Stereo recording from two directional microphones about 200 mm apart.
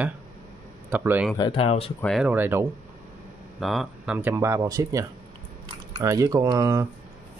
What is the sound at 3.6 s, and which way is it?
Speech, centre (ahead or behind).